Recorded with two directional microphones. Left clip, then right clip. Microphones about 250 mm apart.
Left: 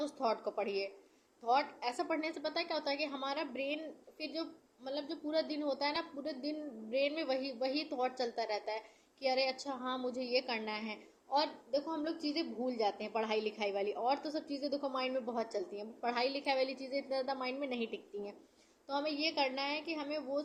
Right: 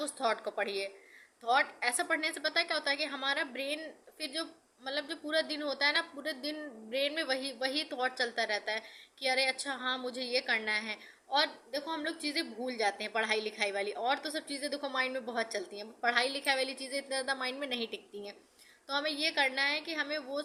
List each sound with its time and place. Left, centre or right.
0.0 s a woman's voice: centre